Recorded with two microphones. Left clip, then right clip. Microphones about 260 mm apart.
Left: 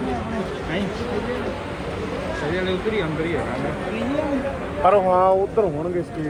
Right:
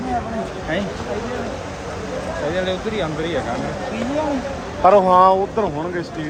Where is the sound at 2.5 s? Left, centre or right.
Right.